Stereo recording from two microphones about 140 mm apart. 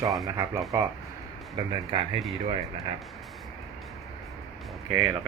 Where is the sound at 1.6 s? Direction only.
30° right (ahead or behind).